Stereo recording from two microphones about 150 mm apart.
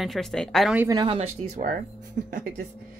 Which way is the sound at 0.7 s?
20° right (ahead or behind).